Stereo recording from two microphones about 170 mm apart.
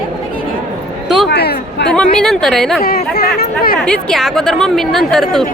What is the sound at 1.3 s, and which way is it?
Speech, 75° left (ahead or behind).